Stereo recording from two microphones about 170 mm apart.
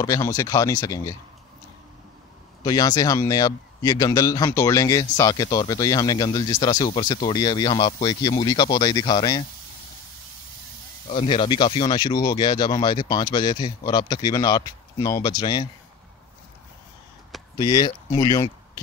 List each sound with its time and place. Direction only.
0.0 s a man's voice: 20° left (ahead or behind)
2.6 s a man's voice: 25° left (ahead or behind)
11.1 s a man's voice: 30° left (ahead or behind)
17.6 s a man's voice: 25° left (ahead or behind)